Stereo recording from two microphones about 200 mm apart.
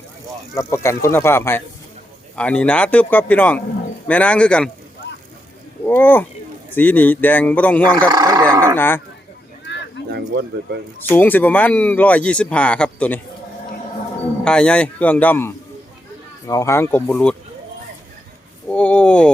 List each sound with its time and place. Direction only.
0.5 s speech: 15° left (ahead or behind)
5.8 s speech: 10° left (ahead or behind)
8.1 s a sound: 20° right (ahead or behind)
8.7 s speech: 10° left (ahead or behind)
10.1 s speech: 55° right (ahead or behind)
11.1 s speech: 10° left (ahead or behind)
14.4 s speech: 5° left (ahead or behind)
18.7 s speech: 5° left (ahead or behind)